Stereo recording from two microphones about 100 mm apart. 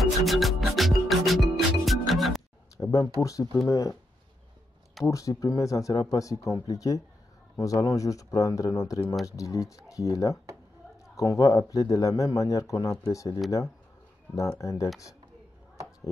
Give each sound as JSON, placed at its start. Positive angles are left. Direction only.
{"t": 0.0, "sound": "music", "side_deg": 0}
{"t": 2.8, "sound": "a sound", "side_deg": 35}
{"t": 3.2, "sound": "speech", "side_deg": 35}
{"t": 5.0, "sound": "speech", "side_deg": 35}